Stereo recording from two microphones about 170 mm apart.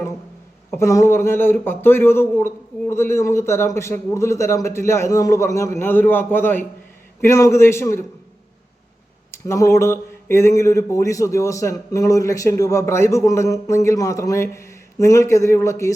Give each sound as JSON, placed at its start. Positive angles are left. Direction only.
{"t": 0.7, "sound": "speech", "side_deg": 15}
{"t": 9.3, "sound": "speech", "side_deg": 15}